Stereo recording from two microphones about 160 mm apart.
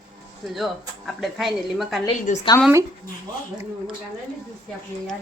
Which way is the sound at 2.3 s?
55° left (ahead or behind).